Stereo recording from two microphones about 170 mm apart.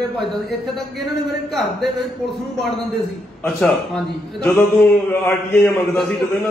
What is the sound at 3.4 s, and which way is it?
A man's voice, 5° left (ahead or behind).